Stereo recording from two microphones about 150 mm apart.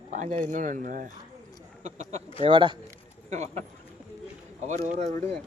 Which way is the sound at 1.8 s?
50° right (ahead or behind).